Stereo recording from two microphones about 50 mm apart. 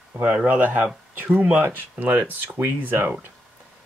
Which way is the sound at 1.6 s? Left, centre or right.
Right.